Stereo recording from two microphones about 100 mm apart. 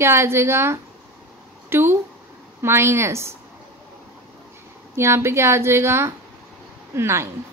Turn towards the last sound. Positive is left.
turn(degrees=-25)  # may be behind; listen again after turning